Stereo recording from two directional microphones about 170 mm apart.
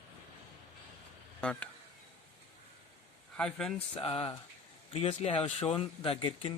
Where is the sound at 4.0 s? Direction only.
35° left (ahead or behind).